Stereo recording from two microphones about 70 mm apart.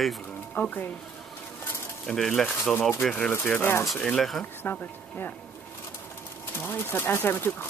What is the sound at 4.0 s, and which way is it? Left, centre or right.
Speech, centre.